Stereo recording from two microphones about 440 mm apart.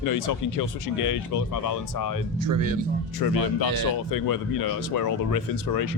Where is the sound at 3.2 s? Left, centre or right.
Left.